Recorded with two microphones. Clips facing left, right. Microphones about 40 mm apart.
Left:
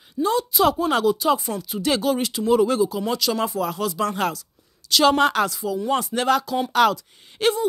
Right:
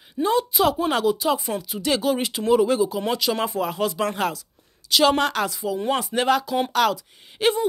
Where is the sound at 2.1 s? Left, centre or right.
Right.